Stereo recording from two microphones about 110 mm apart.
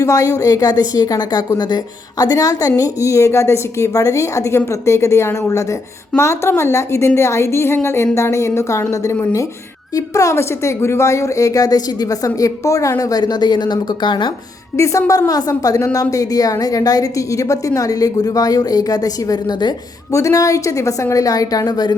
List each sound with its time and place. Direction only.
0.0 s a woman's voice: 30° left (ahead or behind)
14.8 s a woman's voice: 30° left (ahead or behind)